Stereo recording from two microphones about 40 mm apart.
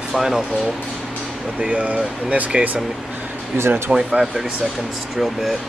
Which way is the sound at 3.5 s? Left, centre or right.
Right.